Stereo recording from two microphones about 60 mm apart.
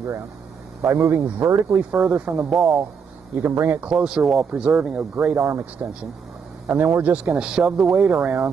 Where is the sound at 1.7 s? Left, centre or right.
Centre.